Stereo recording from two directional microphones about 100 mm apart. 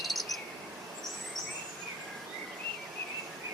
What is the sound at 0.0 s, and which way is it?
Cricket, centre (ahead or behind).